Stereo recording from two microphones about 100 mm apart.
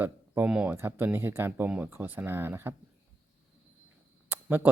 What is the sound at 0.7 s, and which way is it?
Speech, 25° right (ahead or behind).